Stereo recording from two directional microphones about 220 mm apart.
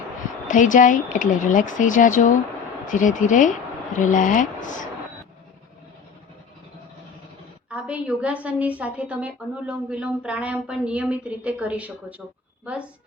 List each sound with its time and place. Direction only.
0.4 s speech: 35° left (ahead or behind)
7.7 s a woman's voice: 5° right (ahead or behind)